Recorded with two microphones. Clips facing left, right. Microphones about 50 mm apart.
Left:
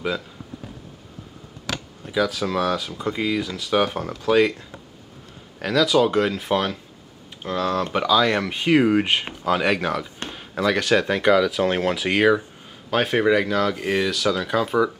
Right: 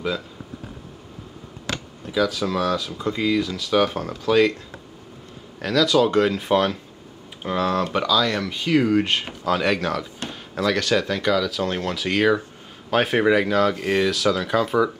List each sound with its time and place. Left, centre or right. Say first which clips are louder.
2.1 s speech: even; centre
5.6 s speech: even; centre
8.1 s speech: left 2 dB; left
12.9 s speech: right 1 dB; centre